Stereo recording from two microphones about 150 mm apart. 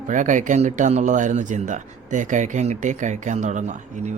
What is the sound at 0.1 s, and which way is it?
Speech, 55° right (ahead or behind).